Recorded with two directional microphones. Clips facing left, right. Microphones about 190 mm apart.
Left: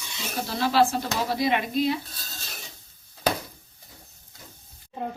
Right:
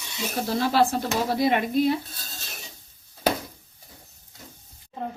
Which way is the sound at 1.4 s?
50° right (ahead or behind).